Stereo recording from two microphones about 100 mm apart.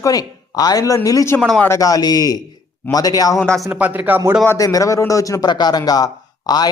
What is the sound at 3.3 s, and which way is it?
Speech, 5° left (ahead or behind).